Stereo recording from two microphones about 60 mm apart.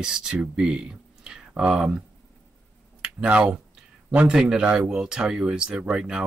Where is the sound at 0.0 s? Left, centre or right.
Centre.